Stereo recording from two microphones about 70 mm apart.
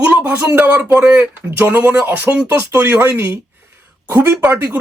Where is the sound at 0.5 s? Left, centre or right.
Right.